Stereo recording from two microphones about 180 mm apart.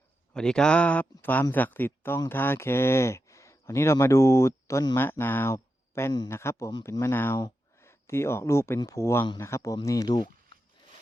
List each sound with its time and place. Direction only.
0.3 s speech: 5° left (ahead or behind); by 10.2 s 20° left (ahead or behind)